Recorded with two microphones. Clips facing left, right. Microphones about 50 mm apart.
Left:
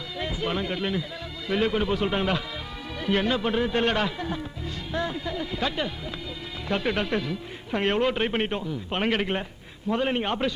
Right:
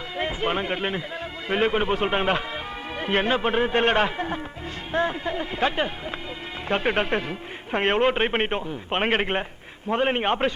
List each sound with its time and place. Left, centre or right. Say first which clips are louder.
0.2 s speech: right 3 dB; right